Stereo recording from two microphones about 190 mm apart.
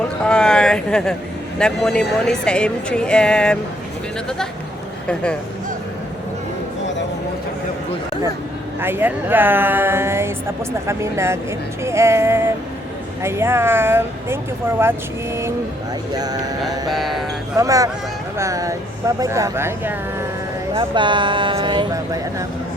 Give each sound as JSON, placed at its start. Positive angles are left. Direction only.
{"t": 0.3, "sound": "a sound", "side_deg": 5}
{"t": 1.5, "sound": "speech", "side_deg": 5}
{"t": 5.0, "sound": "speech", "side_deg": 5}
{"t": 8.8, "sound": "speech", "side_deg": -10}
{"t": 16.1, "sound": "speech", "side_deg": -20}
{"t": 16.9, "sound": "speech", "side_deg": 0}
{"t": 17.6, "sound": "speech", "side_deg": -15}
{"t": 20.7, "sound": "speech", "side_deg": -25}